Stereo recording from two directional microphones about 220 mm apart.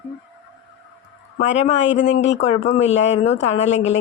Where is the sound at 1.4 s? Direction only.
30° left (ahead or behind).